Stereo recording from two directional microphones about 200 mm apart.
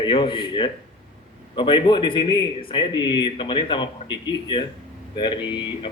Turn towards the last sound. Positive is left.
turn(degrees=25)  # may be behind; listen again after turning